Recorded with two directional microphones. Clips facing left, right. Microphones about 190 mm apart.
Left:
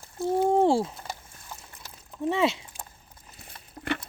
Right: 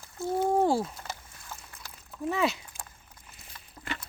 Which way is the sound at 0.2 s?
25° left (ahead or behind).